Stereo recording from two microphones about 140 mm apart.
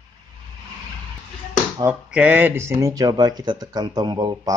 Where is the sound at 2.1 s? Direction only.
10° right (ahead or behind); by 4.5 s 25° right (ahead or behind).